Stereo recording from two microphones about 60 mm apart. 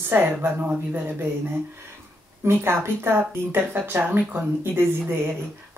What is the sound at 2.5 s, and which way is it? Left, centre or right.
Speech, right.